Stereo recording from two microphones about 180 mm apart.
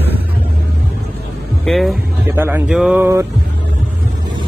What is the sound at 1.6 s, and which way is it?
Speech, centre (ahead or behind).